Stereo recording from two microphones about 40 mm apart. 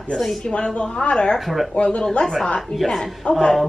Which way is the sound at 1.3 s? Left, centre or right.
Centre.